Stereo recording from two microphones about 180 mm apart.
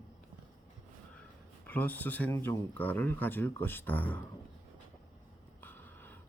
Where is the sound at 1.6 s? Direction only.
10° left (ahead or behind).